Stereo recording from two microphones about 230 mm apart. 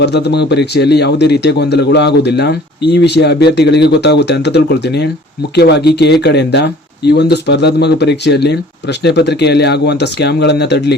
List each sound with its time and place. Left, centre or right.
0.0 s a man's voice: left